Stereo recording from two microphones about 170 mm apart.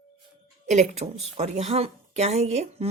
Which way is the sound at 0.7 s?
40° right (ahead or behind).